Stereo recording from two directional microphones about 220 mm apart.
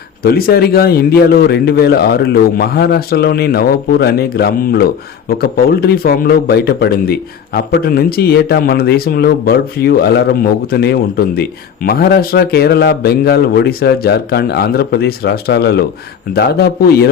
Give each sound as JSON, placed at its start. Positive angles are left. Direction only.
{"t": 0.2, "sound": "speech", "side_deg": 45}